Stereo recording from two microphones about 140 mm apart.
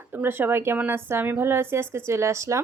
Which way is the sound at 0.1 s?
15° right (ahead or behind).